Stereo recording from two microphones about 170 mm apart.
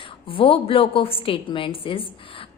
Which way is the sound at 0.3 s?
30° left (ahead or behind).